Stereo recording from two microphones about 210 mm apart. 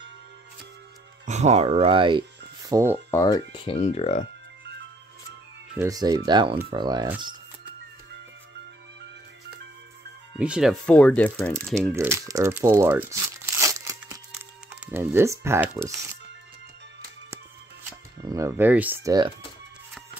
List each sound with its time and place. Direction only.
1.2 s speech: 35° right (ahead or behind); by 3.0 s 15° right (ahead or behind)
3.1 s speech: 15° left (ahead or behind)
5.8 s speech: 15° right (ahead or behind)
10.3 s speech: 5° right (ahead or behind)
11.9 s crumpling: 15° right (ahead or behind)
14.3 s speech: 5° right (ahead or behind)
17.8 s speech: 15° right (ahead or behind)